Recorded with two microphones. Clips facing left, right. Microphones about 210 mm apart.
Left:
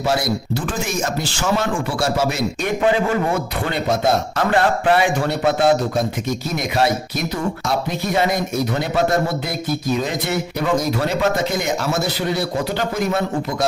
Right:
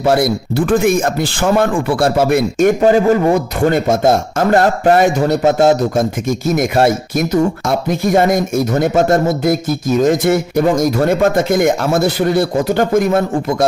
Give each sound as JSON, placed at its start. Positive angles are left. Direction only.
{"t": 0.0, "sound": "speech", "side_deg": -55}
{"t": 2.8, "sound": "a man's voice", "side_deg": -40}